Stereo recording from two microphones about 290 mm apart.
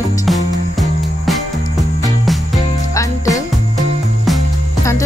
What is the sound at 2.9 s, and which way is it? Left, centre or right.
Music, centre.